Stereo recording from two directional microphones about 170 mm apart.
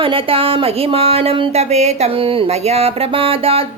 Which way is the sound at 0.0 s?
30° right (ahead or behind).